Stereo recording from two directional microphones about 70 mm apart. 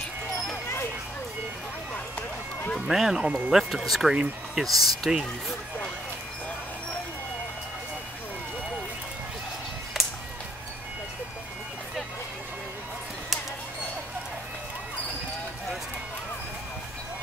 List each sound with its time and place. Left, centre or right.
2.9 s speech: centre
3.3 s speech: centre
3.5 s speech: centre
9.9 s music: centre